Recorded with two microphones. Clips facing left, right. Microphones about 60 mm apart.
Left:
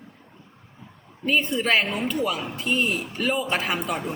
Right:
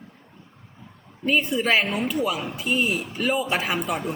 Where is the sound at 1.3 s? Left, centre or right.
Centre.